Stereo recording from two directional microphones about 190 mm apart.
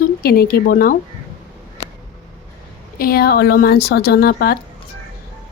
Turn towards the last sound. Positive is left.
turn(degrees=55)  # may be behind; listen again after turning